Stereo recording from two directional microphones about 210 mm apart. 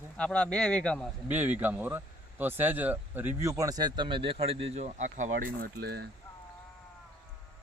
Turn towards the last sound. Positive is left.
turn(degrees=-50)  # may be behind; listen again after turning